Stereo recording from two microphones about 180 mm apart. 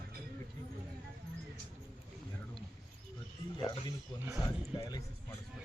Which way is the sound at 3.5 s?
25° left (ahead or behind).